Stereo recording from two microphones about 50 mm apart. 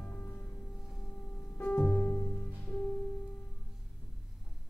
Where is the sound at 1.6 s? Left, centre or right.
Left.